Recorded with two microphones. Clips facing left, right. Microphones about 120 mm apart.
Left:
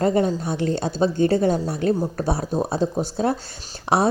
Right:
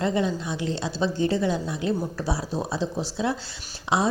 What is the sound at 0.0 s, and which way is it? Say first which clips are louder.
Speech: left 5 dB; 45° left (ahead or behind).